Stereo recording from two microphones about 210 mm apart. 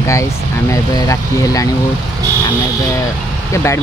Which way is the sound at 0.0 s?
15° left (ahead or behind).